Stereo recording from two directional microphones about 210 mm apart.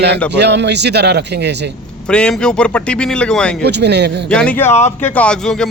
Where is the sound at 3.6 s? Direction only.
55° right (ahead or behind).